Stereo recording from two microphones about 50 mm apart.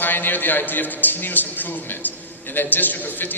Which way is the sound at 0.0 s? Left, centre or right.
Left.